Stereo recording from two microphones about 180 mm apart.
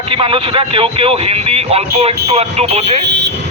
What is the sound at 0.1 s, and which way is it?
Speech, 30° right (ahead or behind).